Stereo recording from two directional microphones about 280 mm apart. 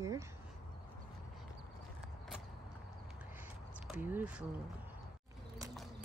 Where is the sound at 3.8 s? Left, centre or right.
Centre.